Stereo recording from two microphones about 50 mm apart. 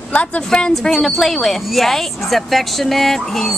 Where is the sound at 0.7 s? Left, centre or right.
Centre.